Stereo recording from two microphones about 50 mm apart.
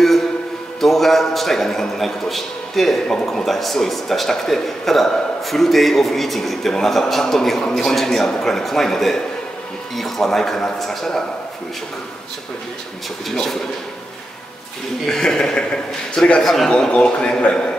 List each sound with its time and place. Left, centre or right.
0.7 s a man's voice: centre
15.0 s a man's voice: centre
16.9 s a man's voice: centre